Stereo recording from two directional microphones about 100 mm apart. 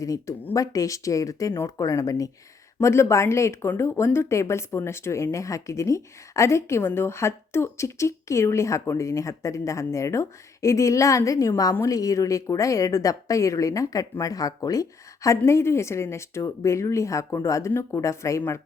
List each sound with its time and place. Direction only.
0.0 s a woman's voice: 35° left (ahead or behind)